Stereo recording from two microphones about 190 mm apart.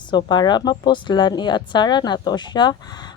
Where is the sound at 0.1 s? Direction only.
25° left (ahead or behind).